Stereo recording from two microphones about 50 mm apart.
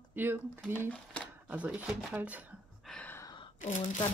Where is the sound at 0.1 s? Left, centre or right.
Right.